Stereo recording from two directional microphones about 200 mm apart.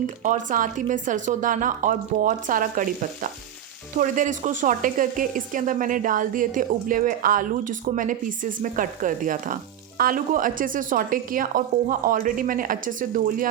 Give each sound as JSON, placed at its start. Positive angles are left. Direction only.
{"t": 0.2, "sound": "a woman's voice", "side_deg": -40}